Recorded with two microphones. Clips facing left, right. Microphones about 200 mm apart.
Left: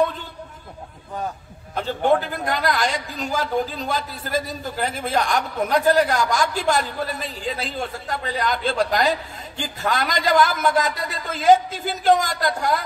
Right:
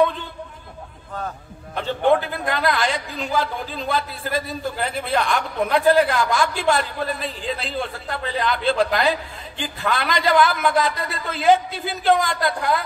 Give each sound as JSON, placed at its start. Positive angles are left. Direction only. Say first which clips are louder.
{"t": 1.8, "sound": "a man's voice", "louder": "right 1 dB", "side_deg": 40}